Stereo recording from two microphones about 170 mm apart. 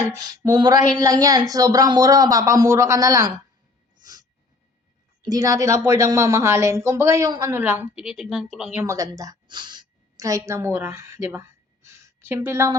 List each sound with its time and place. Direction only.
0.2 s speech: 25° right (ahead or behind)
5.2 s a woman's voice: 20° right (ahead or behind); by 8.8 s centre (ahead or behind)
8.8 s a woman's voice: 20° right (ahead or behind)